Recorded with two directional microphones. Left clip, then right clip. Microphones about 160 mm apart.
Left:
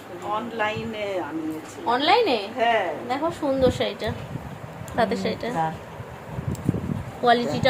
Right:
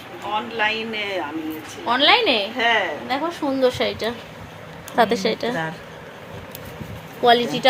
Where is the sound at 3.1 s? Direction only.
50° right (ahead or behind).